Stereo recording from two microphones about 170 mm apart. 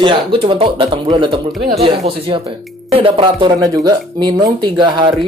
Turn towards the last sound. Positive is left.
turn(degrees=-25)  # may be behind; listen again after turning